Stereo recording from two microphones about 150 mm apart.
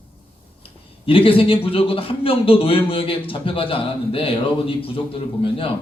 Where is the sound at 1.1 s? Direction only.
35° left (ahead or behind).